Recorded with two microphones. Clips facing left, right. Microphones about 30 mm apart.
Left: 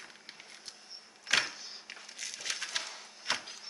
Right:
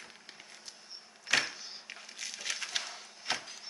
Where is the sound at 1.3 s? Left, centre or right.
Centre.